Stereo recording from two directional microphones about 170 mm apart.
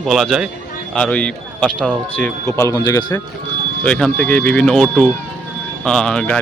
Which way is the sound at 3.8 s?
5° left (ahead or behind).